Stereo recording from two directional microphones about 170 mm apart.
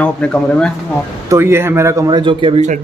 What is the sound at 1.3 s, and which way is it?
Speech, 15° right (ahead or behind).